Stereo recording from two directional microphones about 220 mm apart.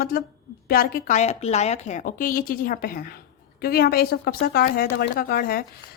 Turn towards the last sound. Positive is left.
turn(degrees=40)  # may be behind; listen again after turning